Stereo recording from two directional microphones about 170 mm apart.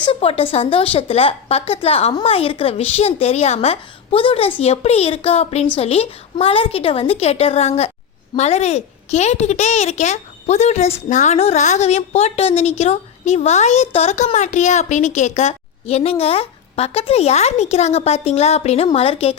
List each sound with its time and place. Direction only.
0.0 s a woman's voice: 30° left (ahead or behind)